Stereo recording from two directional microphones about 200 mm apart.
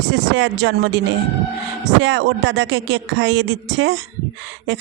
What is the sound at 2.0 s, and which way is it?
Speech, 65° right (ahead or behind).